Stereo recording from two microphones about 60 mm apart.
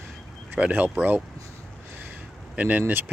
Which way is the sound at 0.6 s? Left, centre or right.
Right.